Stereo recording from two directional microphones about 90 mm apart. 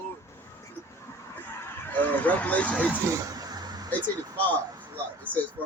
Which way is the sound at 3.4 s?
50° right (ahead or behind).